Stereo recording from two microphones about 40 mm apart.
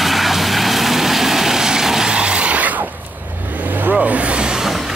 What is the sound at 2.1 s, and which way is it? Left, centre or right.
Vehicle, right.